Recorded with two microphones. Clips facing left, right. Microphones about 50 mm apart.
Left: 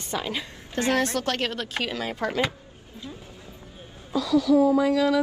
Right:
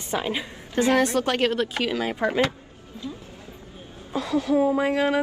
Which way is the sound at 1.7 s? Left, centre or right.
Centre.